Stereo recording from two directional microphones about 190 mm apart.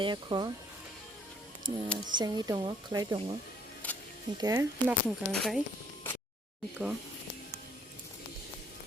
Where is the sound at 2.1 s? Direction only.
20° right (ahead or behind).